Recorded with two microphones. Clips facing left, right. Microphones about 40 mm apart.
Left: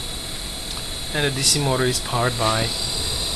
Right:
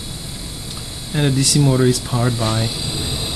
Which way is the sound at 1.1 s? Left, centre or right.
Centre.